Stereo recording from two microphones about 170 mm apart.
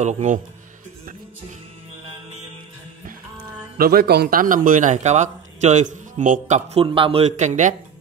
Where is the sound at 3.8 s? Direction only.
65° right (ahead or behind); by 6.8 s 45° right (ahead or behind).